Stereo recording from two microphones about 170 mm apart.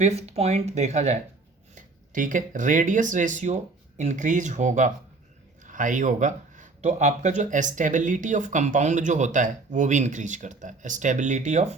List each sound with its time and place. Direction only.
0.0 s speech: 40° right (ahead or behind)